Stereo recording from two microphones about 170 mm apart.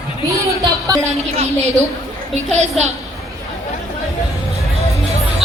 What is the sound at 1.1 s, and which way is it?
Speech, 40° right (ahead or behind).